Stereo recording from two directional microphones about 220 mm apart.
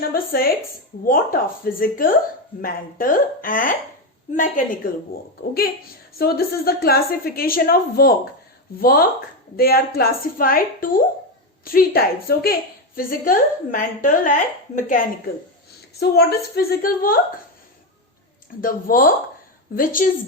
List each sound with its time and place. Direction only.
0.1 s a woman's voice: 40° left (ahead or behind)
18.6 s a woman's voice: 40° left (ahead or behind)